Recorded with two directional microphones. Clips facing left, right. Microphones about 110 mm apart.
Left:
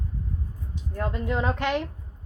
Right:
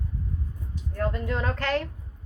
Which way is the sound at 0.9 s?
15° left (ahead or behind).